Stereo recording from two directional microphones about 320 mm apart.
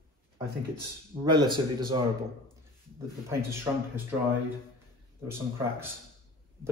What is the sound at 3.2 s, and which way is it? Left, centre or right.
Speech, centre.